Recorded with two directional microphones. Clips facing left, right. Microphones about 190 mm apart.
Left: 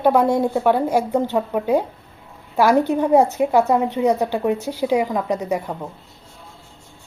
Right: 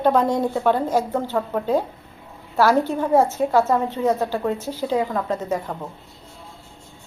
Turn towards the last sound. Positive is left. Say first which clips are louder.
# left 2 dB
turn(degrees=15)  # may be behind; listen again after turning